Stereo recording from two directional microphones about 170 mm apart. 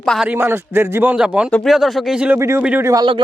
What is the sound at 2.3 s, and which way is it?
Speech, 15° right (ahead or behind).